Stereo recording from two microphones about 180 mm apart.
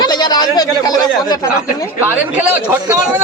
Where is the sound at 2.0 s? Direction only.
10° right (ahead or behind).